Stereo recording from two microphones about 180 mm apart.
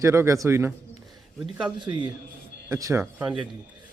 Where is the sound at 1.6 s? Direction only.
25° right (ahead or behind).